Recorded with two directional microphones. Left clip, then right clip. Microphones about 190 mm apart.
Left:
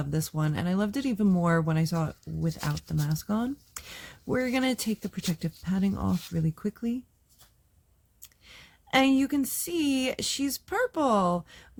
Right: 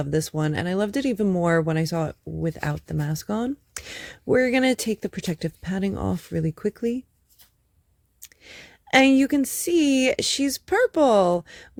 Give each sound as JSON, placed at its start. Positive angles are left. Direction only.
{"t": 0.0, "sound": "speech", "side_deg": -25}
{"t": 8.2, "sound": "speech", "side_deg": -30}